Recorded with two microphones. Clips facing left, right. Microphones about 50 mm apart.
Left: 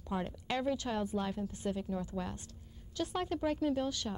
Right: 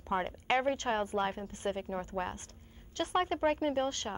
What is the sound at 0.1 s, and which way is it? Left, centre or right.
A woman's voice, right.